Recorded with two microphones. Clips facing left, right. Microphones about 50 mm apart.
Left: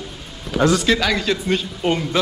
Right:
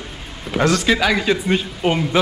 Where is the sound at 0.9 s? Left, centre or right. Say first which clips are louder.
Right 2 dB; centre.